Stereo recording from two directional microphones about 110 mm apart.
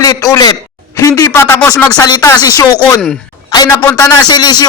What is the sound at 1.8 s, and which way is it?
Speech, 35° left (ahead or behind).